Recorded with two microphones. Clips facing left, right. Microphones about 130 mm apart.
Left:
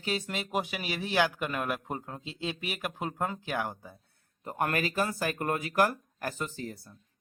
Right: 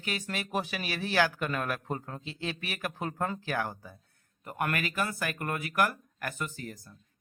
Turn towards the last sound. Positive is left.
turn(degrees=25)  # may be behind; listen again after turning